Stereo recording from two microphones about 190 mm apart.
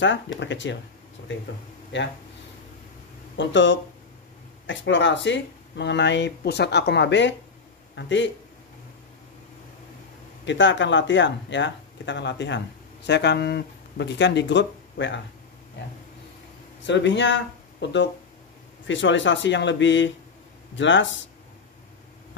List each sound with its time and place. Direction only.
0.4 s speech: 70° left (ahead or behind)
1.9 s speech: 75° left (ahead or behind)
3.3 s a man's voice: 75° left (ahead or behind)
10.4 s speech: 70° left (ahead or behind)
16.8 s speech: 70° left (ahead or behind)